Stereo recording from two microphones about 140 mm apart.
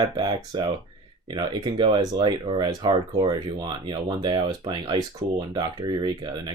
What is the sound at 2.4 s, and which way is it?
Speech, 40° right (ahead or behind).